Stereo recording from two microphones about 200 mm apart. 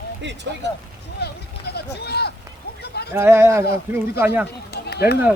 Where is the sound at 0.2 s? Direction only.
60° right (ahead or behind).